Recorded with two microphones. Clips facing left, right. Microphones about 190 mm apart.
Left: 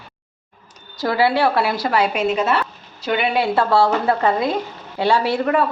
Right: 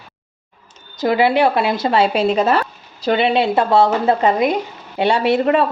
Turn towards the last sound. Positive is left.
turn(degrees=-20)  # may be behind; listen again after turning